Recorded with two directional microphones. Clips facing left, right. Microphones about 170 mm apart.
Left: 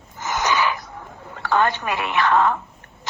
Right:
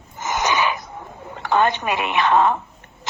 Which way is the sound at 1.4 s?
20° right (ahead or behind).